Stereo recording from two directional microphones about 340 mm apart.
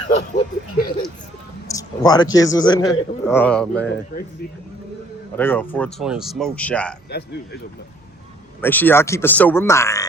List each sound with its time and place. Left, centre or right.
0.3 s a sound: left
1.6 s a man's voice: centre
5.4 s speech: centre
7.1 s speech: left
8.6 s speech: centre